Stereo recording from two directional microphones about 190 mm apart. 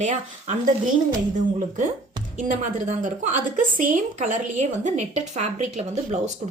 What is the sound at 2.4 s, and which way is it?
A woman's voice, 40° right (ahead or behind).